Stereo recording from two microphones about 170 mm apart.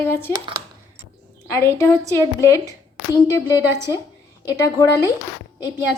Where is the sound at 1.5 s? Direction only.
15° left (ahead or behind).